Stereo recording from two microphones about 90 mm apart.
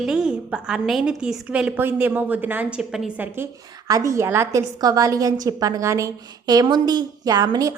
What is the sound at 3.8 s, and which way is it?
Speech, 40° right (ahead or behind).